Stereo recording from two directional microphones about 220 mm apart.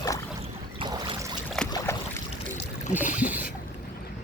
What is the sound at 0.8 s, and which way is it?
Boat, 25° right (ahead or behind).